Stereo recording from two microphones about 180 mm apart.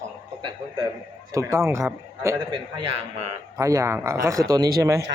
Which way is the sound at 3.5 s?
15° right (ahead or behind).